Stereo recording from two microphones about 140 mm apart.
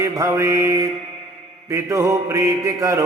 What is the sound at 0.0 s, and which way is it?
Mantra, 20° right (ahead or behind).